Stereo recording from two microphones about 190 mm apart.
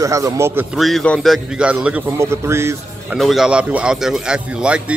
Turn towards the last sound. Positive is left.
turn(degrees=-5)  # may be behind; listen again after turning